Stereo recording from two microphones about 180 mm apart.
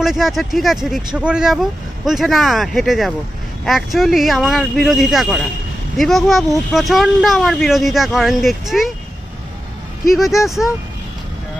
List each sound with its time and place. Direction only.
0.0 s speech: centre (ahead or behind)
10.1 s speech: centre (ahead or behind)